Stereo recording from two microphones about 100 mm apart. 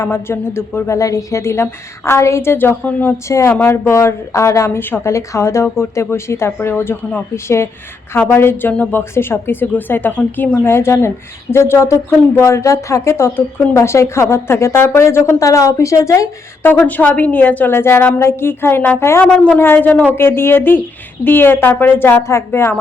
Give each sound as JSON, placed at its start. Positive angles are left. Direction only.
{"t": 0.0, "sound": "speech", "side_deg": 25}
{"t": 3.2, "sound": "speech", "side_deg": 30}
{"t": 16.6, "sound": "speech", "side_deg": 15}